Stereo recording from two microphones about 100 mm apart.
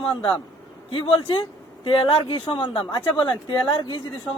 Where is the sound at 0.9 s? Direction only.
65° left (ahead or behind).